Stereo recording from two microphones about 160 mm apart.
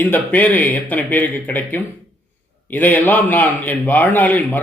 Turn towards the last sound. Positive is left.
turn(degrees=10)  # may be behind; listen again after turning